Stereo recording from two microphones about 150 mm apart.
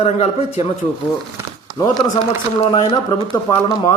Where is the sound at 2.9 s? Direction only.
25° left (ahead or behind).